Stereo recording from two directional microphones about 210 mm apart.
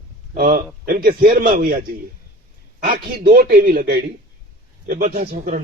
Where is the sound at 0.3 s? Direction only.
45° right (ahead or behind).